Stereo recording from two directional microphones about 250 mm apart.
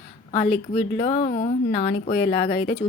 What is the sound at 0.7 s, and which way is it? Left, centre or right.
Speech, left.